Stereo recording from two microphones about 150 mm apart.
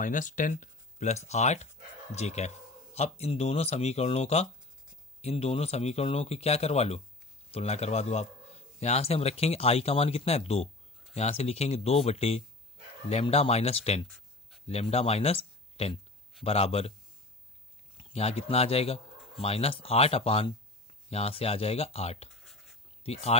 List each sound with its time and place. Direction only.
0.0 s speech: 60° left (ahead or behind); by 16.9 s 40° left (ahead or behind)
17.9 s speech: 45° left (ahead or behind)
22.4 s writing: centre (ahead or behind)
23.0 s speech: 40° left (ahead or behind)